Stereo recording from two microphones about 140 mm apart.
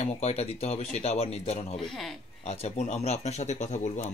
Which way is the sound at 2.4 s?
50° left (ahead or behind).